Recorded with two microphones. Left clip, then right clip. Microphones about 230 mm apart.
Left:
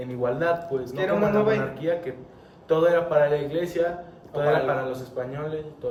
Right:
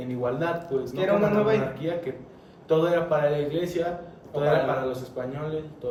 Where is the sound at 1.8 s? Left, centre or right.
Centre.